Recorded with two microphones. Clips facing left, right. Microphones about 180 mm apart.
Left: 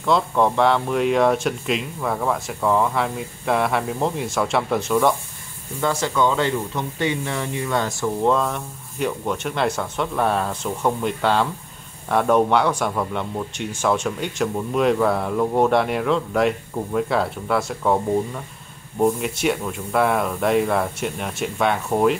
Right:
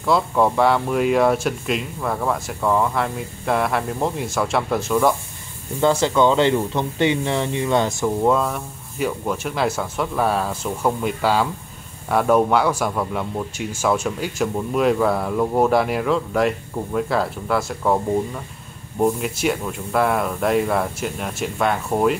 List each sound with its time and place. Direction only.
0.0 s speech: 5° right (ahead or behind)
5.8 s speech: 25° right (ahead or behind)
8.2 s speech: 5° right (ahead or behind)